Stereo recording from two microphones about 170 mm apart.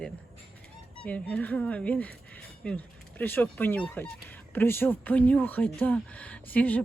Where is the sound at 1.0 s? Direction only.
10° left (ahead or behind).